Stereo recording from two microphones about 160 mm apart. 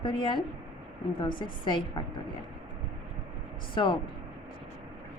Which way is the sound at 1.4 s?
30° left (ahead or behind).